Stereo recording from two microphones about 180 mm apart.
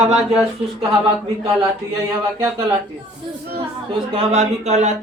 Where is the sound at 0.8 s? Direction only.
30° right (ahead or behind).